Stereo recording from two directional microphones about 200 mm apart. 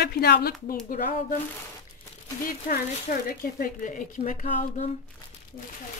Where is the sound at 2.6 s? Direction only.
45° left (ahead or behind).